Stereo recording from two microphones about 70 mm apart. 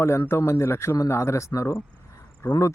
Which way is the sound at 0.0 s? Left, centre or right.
Left.